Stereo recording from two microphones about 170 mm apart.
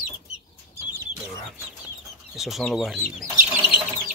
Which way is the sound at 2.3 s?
Centre (ahead or behind).